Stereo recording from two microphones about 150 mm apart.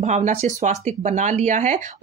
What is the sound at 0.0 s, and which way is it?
Speech, 50° right (ahead or behind).